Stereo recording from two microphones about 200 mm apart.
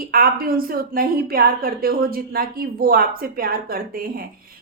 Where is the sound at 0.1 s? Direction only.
50° right (ahead or behind).